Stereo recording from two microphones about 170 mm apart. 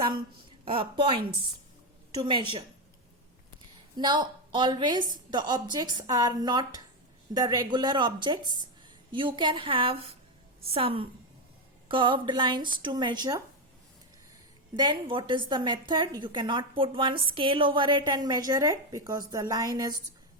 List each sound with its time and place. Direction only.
0.6 s a woman's voice: 30° right (ahead or behind)
2.1 s a woman's voice: 25° right (ahead or behind)
3.9 s a woman's voice: 25° right (ahead or behind)
14.8 s a woman's voice: 30° right (ahead or behind)